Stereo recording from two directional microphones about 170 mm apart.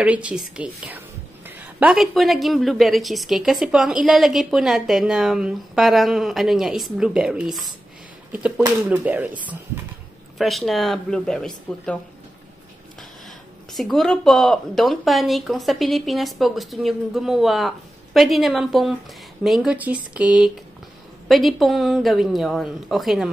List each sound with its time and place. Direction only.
0.0 s a woman's voice: 5° right (ahead or behind)
13.7 s a woman's voice: centre (ahead or behind)